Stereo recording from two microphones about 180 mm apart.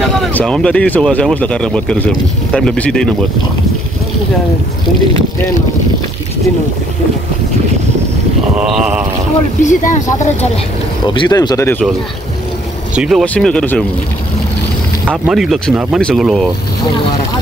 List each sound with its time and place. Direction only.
0.2 s speech: 5° left (ahead or behind)
8.5 s speech: 5° right (ahead or behind)
9.6 s speech: 45° left (ahead or behind)
11.1 s speech: 25° left (ahead or behind)
12.9 s speech: 5° right (ahead or behind)
15.0 s speech: 5° right (ahead or behind)